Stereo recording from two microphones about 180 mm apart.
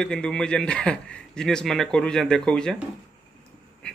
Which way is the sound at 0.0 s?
5° left (ahead or behind).